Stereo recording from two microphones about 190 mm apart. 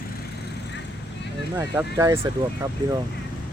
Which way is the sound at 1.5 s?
10° right (ahead or behind).